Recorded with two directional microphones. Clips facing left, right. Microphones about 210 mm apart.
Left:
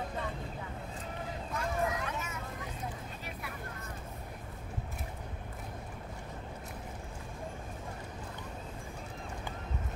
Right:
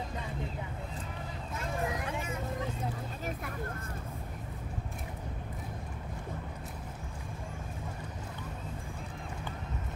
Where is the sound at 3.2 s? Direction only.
50° right (ahead or behind).